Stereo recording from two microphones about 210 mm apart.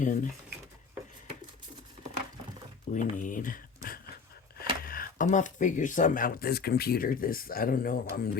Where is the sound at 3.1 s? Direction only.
40° left (ahead or behind).